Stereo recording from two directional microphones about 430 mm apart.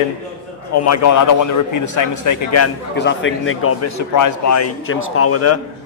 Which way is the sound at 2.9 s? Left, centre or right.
Left.